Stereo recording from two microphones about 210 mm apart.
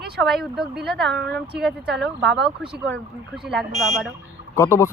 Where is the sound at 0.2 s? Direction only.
Centre (ahead or behind).